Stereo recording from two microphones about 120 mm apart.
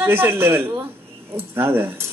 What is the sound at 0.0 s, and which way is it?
A man's voice, 20° right (ahead or behind).